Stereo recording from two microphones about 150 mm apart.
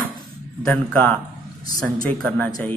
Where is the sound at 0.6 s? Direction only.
10° left (ahead or behind).